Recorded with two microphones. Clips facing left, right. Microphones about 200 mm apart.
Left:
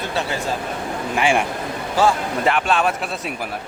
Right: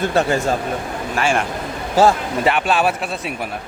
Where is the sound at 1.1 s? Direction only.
15° left (ahead or behind).